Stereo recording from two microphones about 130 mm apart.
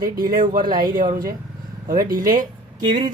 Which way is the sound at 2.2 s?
90° right.